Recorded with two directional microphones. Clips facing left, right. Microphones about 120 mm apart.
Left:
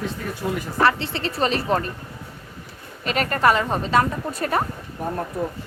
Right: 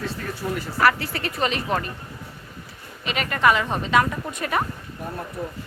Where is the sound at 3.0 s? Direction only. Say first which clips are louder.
Left 2 dB; 40° left (ahead or behind).